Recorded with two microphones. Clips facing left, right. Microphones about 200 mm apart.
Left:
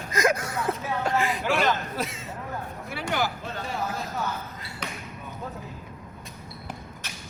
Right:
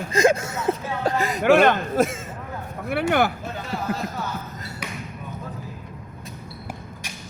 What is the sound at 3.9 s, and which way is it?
Speech, 60° right (ahead or behind).